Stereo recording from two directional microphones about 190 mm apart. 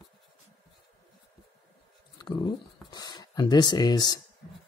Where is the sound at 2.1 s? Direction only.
25° left (ahead or behind).